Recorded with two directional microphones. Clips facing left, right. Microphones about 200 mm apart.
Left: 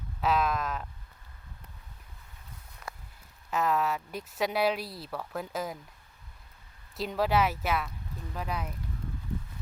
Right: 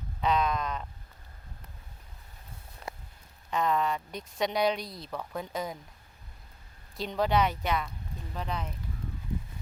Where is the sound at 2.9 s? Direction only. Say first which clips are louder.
Right 2 dB; 20° right (ahead or behind).